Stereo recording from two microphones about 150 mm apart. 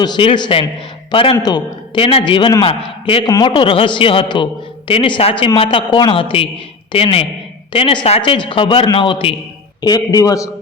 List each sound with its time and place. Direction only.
0.0 s a man's voice: 30° left (ahead or behind)
3.2 s a man's voice: 25° left (ahead or behind)